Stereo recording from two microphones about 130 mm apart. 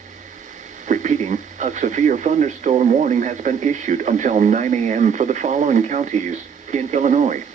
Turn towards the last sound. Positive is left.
turn(degrees=-70)  # may be behind; listen again after turning